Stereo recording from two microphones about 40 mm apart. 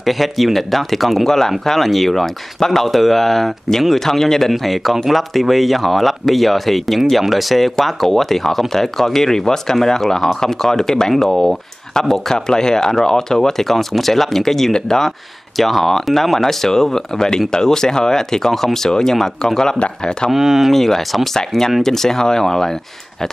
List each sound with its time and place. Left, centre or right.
0.0 s speech: centre
4.5 s speech: centre; by 20.2 s left
20.2 s speech: centre
20.7 s speech: centre